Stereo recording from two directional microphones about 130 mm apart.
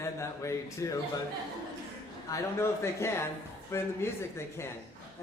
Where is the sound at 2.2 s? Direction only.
25° left (ahead or behind).